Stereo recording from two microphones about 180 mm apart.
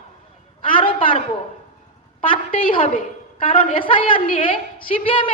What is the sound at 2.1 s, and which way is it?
A woman's voice, 30° left (ahead or behind).